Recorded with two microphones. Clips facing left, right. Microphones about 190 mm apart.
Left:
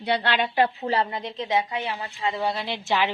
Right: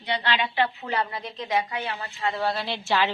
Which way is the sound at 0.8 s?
25° left (ahead or behind).